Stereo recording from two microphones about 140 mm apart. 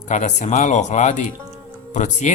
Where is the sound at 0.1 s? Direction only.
55° left (ahead or behind).